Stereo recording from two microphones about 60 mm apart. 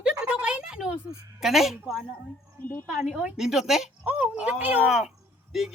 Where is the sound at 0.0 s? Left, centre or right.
Centre.